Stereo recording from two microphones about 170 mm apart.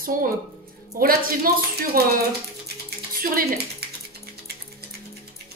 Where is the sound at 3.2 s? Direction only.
65° right (ahead or behind).